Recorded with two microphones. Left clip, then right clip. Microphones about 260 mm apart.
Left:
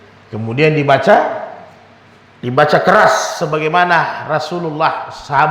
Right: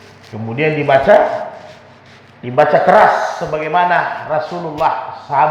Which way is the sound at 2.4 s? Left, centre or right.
Left.